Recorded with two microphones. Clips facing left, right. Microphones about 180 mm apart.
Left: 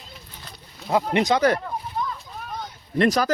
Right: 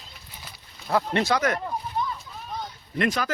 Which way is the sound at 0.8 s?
15° left (ahead or behind).